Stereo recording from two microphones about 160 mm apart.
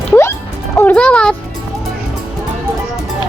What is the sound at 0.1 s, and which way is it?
Music, 15° left (ahead or behind).